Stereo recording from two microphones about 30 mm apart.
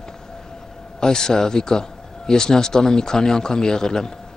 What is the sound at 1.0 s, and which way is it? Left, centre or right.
A man's voice, left.